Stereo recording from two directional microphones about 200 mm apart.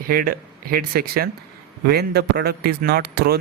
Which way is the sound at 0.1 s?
45° right (ahead or behind).